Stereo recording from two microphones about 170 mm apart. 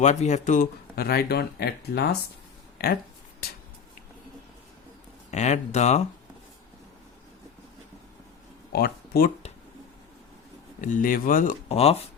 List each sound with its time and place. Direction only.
0.0 s speech: 45° left (ahead or behind); by 3.0 s 65° left (ahead or behind)
3.4 s a sound: 65° left (ahead or behind)
5.3 s speech: 45° left (ahead or behind)
8.7 s speech: 65° left (ahead or behind)
10.8 s speech: 50° left (ahead or behind)
11.7 s speech: 35° left (ahead or behind)